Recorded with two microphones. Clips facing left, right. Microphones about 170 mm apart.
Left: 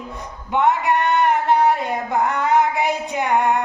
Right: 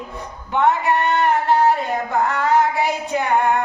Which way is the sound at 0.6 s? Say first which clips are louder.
Right 1 dB; 15° left (ahead or behind).